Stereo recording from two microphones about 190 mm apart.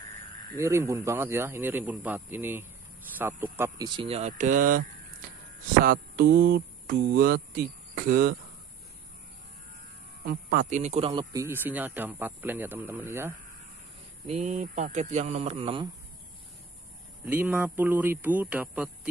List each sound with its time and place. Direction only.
0.6 s a man's voice: 15° right (ahead or behind); by 4.8 s 45° right (ahead or behind)
5.9 s speech: 50° right (ahead or behind)
10.2 s speech: 50° right (ahead or behind); by 11.2 s 30° right (ahead or behind)
11.3 s a man's voice: 10° right (ahead or behind)
14.2 s speech: 35° right (ahead or behind)
17.2 s a man's voice: 10° right (ahead or behind)